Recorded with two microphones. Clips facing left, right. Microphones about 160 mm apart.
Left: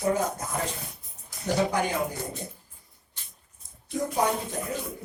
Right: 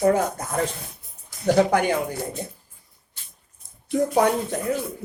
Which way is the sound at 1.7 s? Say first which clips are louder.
Right 6 dB; 65° right (ahead or behind).